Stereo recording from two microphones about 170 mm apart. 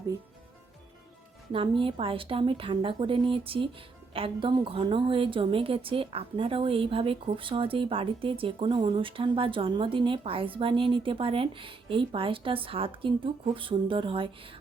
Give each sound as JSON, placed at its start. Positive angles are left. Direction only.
{"t": 1.5, "sound": "a woman's voice", "side_deg": -30}